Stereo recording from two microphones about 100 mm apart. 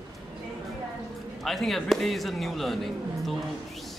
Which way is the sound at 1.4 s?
Centre (ahead or behind).